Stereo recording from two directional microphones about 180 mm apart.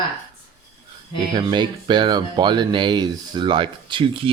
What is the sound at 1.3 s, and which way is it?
Speech, 25° right (ahead or behind).